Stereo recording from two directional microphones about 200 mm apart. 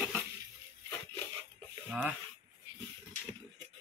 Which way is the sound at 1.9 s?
5° right (ahead or behind).